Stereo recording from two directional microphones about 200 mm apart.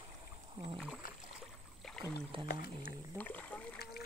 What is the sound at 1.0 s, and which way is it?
Rowboat, 45° left (ahead or behind).